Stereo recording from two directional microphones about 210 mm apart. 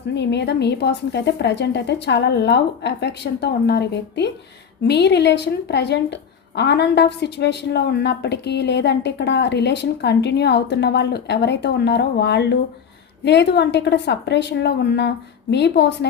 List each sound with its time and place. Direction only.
0.1 s a woman's voice: 55° left (ahead or behind)